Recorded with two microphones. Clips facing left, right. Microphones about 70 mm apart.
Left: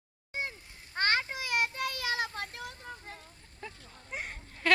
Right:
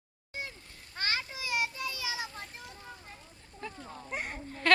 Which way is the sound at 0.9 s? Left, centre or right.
Left.